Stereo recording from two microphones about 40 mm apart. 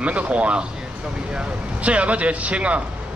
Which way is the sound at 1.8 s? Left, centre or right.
Right.